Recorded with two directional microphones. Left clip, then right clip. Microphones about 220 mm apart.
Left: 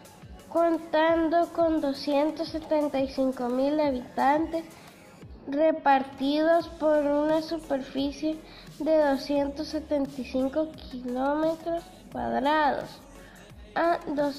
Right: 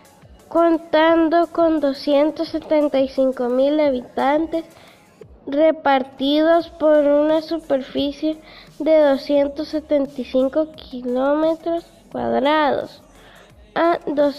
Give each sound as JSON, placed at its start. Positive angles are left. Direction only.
{"t": 0.5, "sound": "a woman's voice", "side_deg": -40}